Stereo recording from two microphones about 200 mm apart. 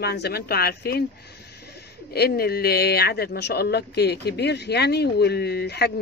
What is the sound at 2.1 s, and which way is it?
Speech, 50° left (ahead or behind).